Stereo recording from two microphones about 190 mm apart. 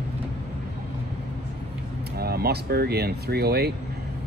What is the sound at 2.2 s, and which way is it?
Speech, 55° right (ahead or behind).